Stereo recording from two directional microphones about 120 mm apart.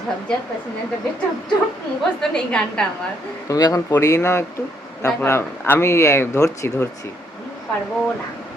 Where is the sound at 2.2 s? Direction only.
5° left (ahead or behind).